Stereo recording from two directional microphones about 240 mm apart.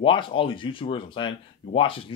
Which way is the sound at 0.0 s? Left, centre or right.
Left.